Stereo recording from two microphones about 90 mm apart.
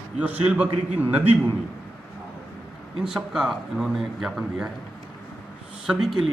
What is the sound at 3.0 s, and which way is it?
A man's voice, 5° right (ahead or behind).